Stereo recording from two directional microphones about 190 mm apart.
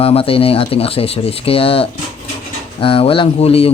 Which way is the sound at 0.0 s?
30° left (ahead or behind).